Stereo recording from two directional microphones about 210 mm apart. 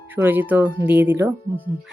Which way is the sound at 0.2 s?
10° right (ahead or behind).